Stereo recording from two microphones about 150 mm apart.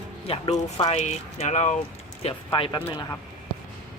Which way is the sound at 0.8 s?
50° left (ahead or behind).